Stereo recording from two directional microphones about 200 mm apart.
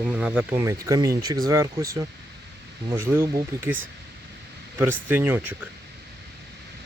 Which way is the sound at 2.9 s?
10° right (ahead or behind).